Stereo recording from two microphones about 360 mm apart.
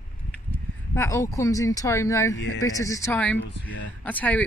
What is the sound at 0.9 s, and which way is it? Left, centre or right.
Speech, centre.